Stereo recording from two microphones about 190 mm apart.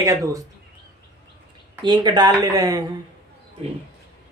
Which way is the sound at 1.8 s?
25° right (ahead or behind).